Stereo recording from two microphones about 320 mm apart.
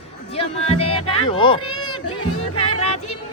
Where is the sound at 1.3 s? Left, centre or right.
Centre.